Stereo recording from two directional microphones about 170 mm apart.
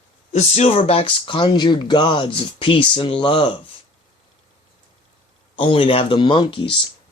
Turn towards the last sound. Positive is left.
turn(degrees=30)  # may be behind; listen again after turning